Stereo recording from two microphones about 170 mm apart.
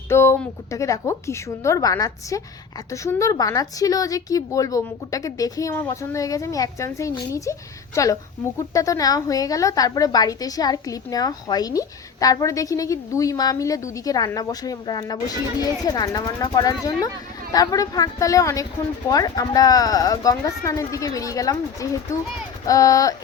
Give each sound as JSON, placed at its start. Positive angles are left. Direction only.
{"t": 0.1, "sound": "a woman's voice", "side_deg": 15}